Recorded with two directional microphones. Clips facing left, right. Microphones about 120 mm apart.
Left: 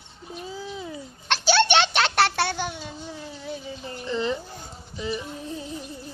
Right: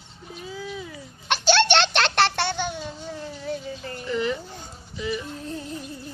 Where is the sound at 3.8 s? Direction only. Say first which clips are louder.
Even; 30° left (ahead or behind).